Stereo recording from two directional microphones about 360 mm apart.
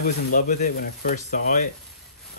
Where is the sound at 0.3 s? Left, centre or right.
Left.